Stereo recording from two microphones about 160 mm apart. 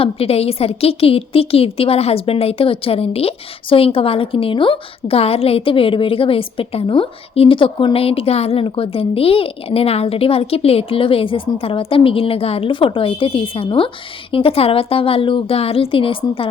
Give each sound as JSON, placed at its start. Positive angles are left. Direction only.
{"t": 0.0, "sound": "a woman's voice", "side_deg": 40}